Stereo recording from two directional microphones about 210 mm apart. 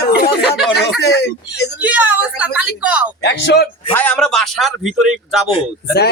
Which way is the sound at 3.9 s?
5° left (ahead or behind).